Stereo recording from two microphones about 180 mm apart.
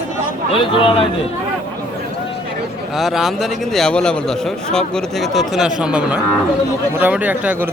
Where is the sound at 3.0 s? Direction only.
Centre (ahead or behind).